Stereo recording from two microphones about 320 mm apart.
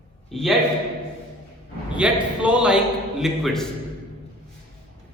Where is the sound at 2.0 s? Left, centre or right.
Centre.